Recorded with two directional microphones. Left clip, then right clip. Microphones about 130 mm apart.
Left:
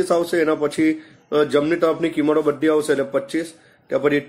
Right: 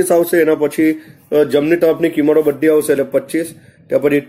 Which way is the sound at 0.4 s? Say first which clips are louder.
Right 6 dB; 25° right (ahead or behind).